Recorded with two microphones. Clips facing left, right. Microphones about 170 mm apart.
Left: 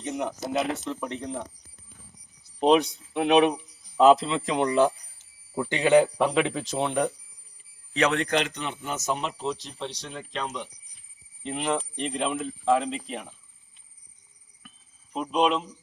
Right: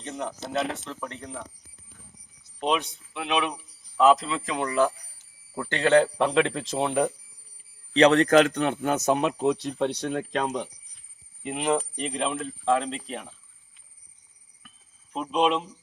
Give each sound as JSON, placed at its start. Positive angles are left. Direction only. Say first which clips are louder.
{"t": 0.0, "sound": "a sound", "louder": "left 3 dB", "side_deg": 15}
{"t": 0.5, "sound": "speech", "louder": "left 1 dB", "side_deg": 15}
{"t": 2.6, "sound": "speech", "louder": "left 6 dB", "side_deg": 35}
{"t": 3.9, "sound": "speech", "louder": "left 2 dB", "side_deg": 25}
{"t": 5.5, "sound": "speech", "louder": "left 1 dB", "side_deg": 15}
{"t": 7.9, "sound": "speech", "louder": "right 7 dB", "side_deg": -35}
{"t": 11.4, "sound": "speech", "louder": "right 2 dB", "side_deg": -10}
{"t": 14.6, "sound": "a sound", "louder": "left 3 dB", "side_deg": 0}
{"t": 15.1, "sound": "speech", "louder": "even", "side_deg": 5}